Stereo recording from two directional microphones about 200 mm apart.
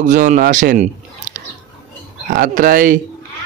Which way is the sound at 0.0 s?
40° right (ahead or behind).